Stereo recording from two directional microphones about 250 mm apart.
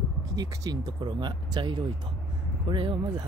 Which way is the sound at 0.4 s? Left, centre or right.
Centre.